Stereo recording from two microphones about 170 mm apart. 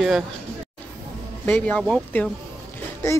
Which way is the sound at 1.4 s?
10° left (ahead or behind).